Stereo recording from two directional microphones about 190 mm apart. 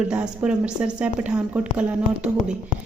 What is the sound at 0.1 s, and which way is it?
Speech, 5° right (ahead or behind).